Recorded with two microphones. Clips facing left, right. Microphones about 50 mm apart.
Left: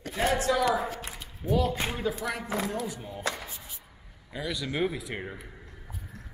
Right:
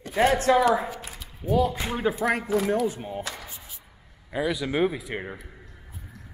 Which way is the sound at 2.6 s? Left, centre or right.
Right.